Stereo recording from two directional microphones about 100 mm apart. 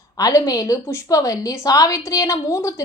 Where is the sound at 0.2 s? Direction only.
35° left (ahead or behind).